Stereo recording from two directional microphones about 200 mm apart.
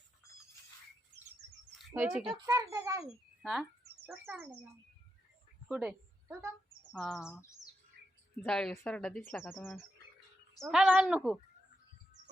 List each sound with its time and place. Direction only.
1.9 s a child's voice: 10° right (ahead or behind)
3.4 s a child's voice: centre (ahead or behind)
5.6 s a woman's voice: 5° right (ahead or behind)
6.9 s speech: 5° left (ahead or behind)